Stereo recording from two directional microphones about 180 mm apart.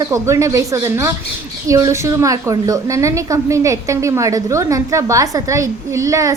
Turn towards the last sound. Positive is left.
turn(degrees=-20)  # may be behind; listen again after turning